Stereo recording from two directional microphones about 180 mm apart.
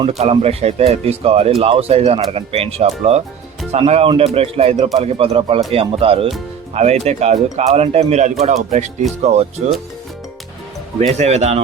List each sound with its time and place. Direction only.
0.2 s speech: 35° right (ahead or behind)
11.2 s speech: 35° right (ahead or behind)